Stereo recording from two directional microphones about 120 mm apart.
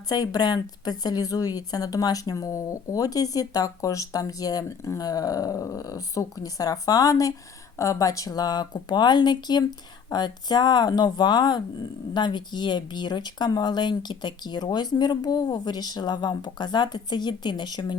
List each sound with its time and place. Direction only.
0.1 s speech: 30° left (ahead or behind)